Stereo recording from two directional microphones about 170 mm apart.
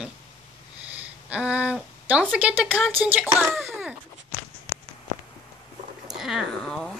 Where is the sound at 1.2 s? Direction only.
5° right (ahead or behind).